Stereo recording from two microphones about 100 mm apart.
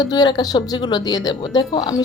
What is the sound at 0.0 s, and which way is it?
Speech, 40° left (ahead or behind).